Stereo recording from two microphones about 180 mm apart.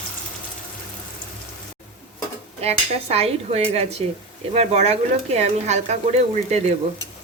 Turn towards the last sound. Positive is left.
turn(degrees=-35)  # may be behind; listen again after turning